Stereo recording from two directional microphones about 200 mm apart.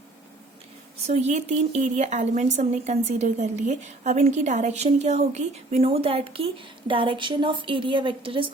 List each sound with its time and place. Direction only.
1.0 s a woman's voice: 35° right (ahead or behind)